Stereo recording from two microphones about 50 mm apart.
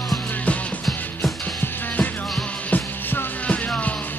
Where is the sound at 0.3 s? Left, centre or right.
Left.